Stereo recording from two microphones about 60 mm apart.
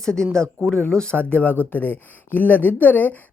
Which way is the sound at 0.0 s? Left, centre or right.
Centre.